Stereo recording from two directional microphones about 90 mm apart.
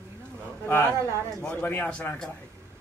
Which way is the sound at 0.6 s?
25° left (ahead or behind).